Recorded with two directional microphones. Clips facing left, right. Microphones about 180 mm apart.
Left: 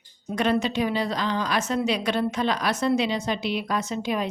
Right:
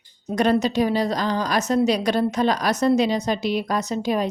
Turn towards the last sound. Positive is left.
turn(degrees=-40)  # may be behind; listen again after turning